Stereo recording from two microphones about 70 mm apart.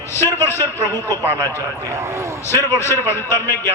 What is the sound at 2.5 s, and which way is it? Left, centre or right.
A man's voice, left.